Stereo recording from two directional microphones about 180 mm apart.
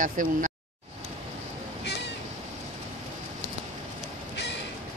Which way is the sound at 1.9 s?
70° left (ahead or behind).